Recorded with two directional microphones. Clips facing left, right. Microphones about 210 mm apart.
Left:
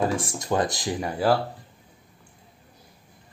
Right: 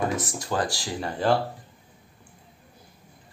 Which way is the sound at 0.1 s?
25° left (ahead or behind).